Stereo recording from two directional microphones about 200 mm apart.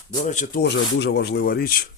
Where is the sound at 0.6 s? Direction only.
60° left (ahead or behind).